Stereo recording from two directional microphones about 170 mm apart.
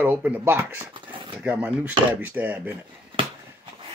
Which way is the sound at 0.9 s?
30° right (ahead or behind).